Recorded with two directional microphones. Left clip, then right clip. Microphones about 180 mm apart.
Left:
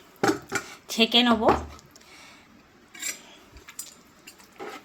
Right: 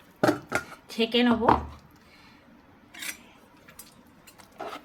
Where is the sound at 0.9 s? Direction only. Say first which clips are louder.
Left 4 dB; 40° left (ahead or behind).